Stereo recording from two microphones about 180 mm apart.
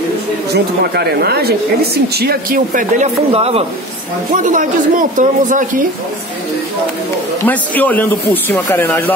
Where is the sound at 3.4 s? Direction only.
35° right (ahead or behind).